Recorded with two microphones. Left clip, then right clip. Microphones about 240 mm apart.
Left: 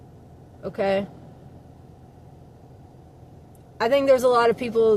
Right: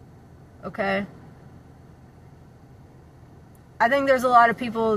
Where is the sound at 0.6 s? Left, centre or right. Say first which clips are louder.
Left 2 dB; centre.